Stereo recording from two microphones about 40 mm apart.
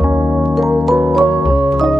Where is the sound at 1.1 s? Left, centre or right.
Centre.